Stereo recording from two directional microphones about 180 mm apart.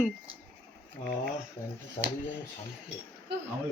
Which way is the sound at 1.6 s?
10° left (ahead or behind).